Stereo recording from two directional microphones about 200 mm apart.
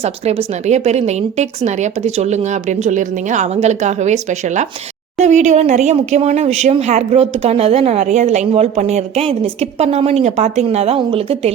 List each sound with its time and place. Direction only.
0.0 s speech: 30° right (ahead or behind)